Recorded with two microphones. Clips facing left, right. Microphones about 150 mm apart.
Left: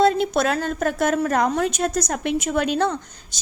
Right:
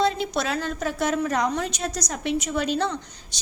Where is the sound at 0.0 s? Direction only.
50° left (ahead or behind).